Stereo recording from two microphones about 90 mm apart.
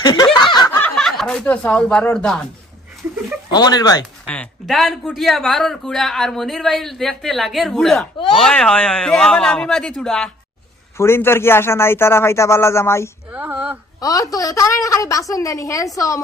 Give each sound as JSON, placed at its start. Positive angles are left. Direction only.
{"t": 0.0, "sound": "a sound", "side_deg": 50}
{"t": 0.9, "sound": "speech", "side_deg": 5}
{"t": 3.5, "sound": "speech", "side_deg": 50}
{"t": 4.6, "sound": "a man's voice", "side_deg": 0}
{"t": 10.9, "sound": "a man's voice", "side_deg": 30}
{"t": 13.3, "sound": "a sound", "side_deg": -15}
{"t": 14.0, "sound": "a woman's voice", "side_deg": 40}